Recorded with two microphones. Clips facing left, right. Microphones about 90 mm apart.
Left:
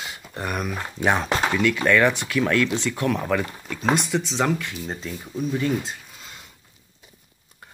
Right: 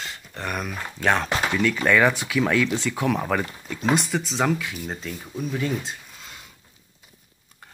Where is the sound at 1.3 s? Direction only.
30° left (ahead or behind).